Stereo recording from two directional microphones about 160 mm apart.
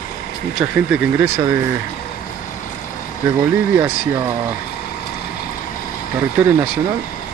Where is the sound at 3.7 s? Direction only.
15° right (ahead or behind).